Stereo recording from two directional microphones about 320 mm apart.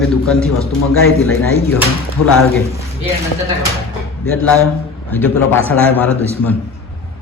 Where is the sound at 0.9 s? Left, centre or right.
Left.